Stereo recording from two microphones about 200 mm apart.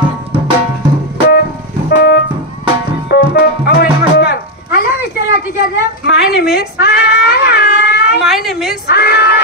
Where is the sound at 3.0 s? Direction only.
55° left (ahead or behind).